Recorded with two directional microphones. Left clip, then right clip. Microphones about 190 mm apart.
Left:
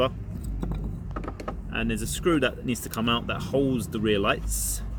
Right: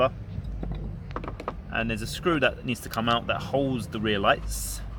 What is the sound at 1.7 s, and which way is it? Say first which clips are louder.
Speech: right 1 dB; 45° right (ahead or behind).